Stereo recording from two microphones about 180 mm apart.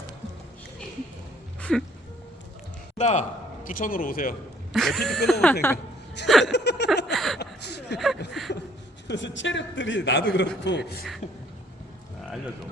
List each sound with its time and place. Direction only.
1.7 s speech: 5° left (ahead or behind)
3.0 s a man's voice: 40° left (ahead or behind)
4.7 s speech: centre (ahead or behind)
6.4 s chuckle: 70° left (ahead or behind)
7.1 s chuckle: centre (ahead or behind)
7.3 s a sound: 70° left (ahead or behind)
7.9 s a sound: centre (ahead or behind)
8.3 s chuckle: centre (ahead or behind)
9.0 s a man's voice: 85° left
10.6 s a man's voice: 70° left (ahead or behind)
11.2 s speech: 40° left (ahead or behind)